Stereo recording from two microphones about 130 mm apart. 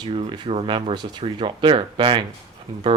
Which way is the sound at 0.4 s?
45° right (ahead or behind).